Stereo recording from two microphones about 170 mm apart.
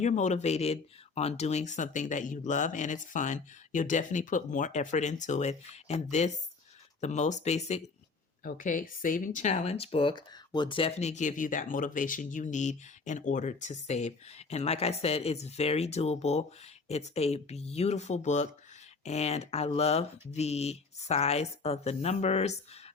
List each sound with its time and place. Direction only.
0.0 s speech: 45° left (ahead or behind)
8.4 s speech: 50° left (ahead or behind)